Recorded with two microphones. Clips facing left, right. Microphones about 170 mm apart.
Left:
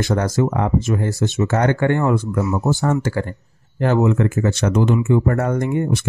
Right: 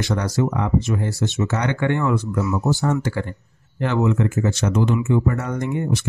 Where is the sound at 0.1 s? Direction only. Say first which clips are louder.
Left 2 dB; 50° left (ahead or behind).